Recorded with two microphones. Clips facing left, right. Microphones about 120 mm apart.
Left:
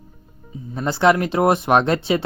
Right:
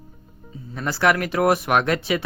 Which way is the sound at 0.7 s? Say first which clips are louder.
Left 4 dB; 25° left (ahead or behind).